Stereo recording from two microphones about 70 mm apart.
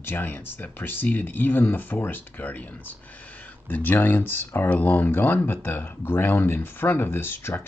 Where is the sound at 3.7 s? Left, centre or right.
Left.